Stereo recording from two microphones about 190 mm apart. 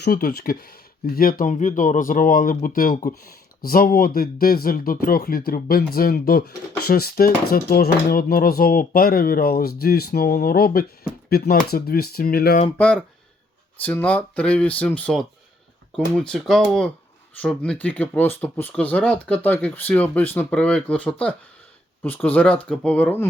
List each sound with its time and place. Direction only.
0.0 s speech: 55° left (ahead or behind)
12.7 s speech: 5° left (ahead or behind)